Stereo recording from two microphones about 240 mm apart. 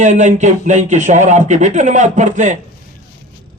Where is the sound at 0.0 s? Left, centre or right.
Right.